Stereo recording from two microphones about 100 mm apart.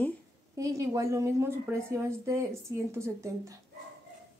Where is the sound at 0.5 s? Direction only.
35° right (ahead or behind).